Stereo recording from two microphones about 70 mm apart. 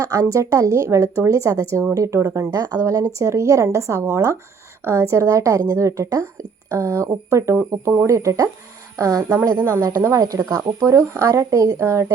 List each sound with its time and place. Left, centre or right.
0.0 s a woman's voice: right
9.4 s speech: right